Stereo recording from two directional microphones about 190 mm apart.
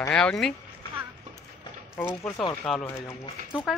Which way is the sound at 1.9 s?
15° left (ahead or behind).